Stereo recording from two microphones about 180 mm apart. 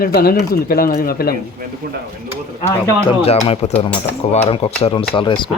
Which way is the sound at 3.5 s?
35° left (ahead or behind).